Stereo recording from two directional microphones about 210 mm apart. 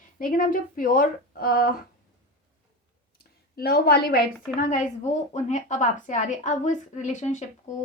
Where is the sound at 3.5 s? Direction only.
45° left (ahead or behind).